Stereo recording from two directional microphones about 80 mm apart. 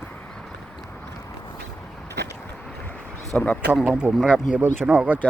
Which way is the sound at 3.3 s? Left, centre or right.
Centre.